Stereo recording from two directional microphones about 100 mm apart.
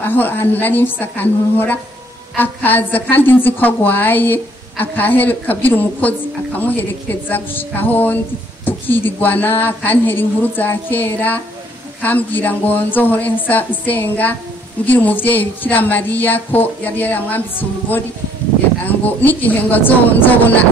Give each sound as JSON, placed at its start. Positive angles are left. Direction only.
{"t": 0.0, "sound": "a woman's voice", "side_deg": 20}